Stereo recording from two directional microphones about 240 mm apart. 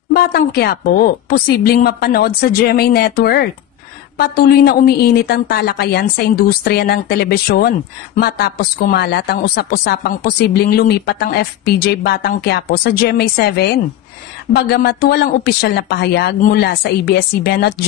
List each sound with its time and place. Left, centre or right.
0.1 s speech: left